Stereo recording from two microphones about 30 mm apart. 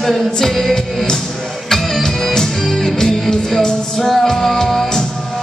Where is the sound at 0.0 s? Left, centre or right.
Centre.